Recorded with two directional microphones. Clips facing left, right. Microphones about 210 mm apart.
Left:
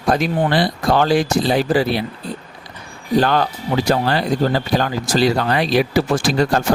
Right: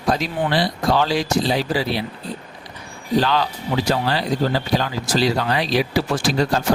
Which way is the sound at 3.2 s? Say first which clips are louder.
Left 3 dB; 50° left (ahead or behind).